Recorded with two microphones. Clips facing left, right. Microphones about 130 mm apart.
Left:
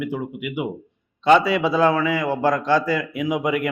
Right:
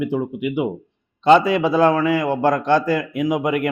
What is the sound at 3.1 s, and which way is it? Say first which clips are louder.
Speech: right 2 dB; 45° right (ahead or behind).